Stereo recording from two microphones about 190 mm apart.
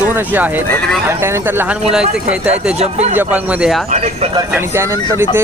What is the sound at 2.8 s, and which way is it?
Speech, 35° right (ahead or behind).